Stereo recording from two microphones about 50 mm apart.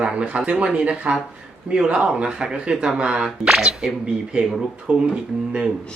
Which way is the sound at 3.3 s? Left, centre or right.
Centre.